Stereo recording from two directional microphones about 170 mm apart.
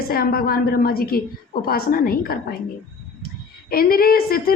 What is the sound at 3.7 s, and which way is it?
Speech, 60° left (ahead or behind).